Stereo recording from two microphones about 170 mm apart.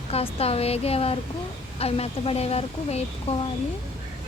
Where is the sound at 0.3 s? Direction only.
35° left (ahead or behind).